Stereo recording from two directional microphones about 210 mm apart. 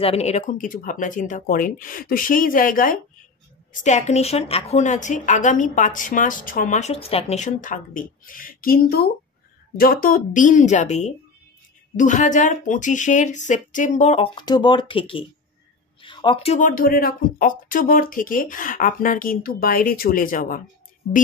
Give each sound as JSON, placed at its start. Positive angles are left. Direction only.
{"t": 0.0, "sound": "a woman's voice", "side_deg": 30}